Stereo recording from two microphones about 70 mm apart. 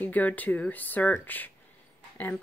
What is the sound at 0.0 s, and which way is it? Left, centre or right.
Speech, left.